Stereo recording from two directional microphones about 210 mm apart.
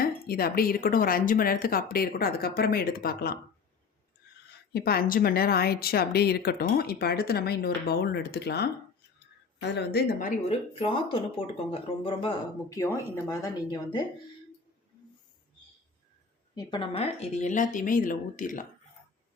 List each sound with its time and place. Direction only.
0.0 s speech: 45° left (ahead or behind)
4.7 s speech: 45° left (ahead or behind); by 14.1 s 20° left (ahead or behind)
16.6 s speech: 20° left (ahead or behind); by 18.6 s 40° left (ahead or behind)